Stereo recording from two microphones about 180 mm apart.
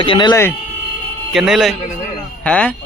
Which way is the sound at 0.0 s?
25° left (ahead or behind).